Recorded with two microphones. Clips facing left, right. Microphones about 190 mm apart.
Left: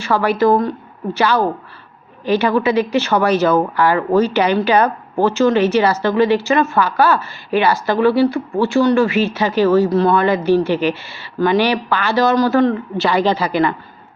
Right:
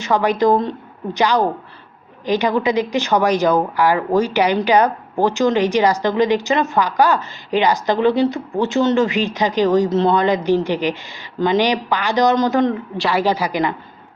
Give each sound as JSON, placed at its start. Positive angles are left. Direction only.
{"t": 0.0, "sound": "speech", "side_deg": -15}
{"t": 13.0, "sound": "speech", "side_deg": -5}